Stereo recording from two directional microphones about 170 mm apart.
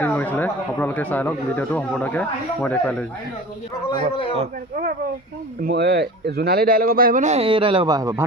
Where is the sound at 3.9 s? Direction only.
30° left (ahead or behind).